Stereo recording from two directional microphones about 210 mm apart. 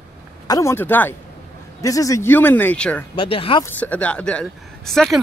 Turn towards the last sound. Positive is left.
turn(degrees=0)  # may be behind; listen again after turning